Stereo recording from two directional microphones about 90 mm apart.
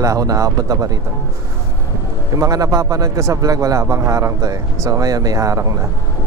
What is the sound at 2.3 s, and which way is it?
A man's voice, 40° right (ahead or behind).